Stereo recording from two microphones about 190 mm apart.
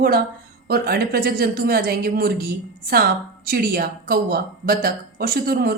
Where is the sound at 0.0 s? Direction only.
55° right (ahead or behind).